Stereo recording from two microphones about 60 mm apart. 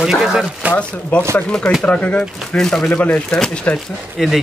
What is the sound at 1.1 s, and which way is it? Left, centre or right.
Speech, left.